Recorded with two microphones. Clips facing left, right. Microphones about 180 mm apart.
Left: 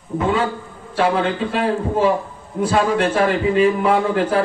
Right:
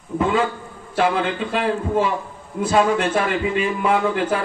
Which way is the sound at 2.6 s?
35° left (ahead or behind).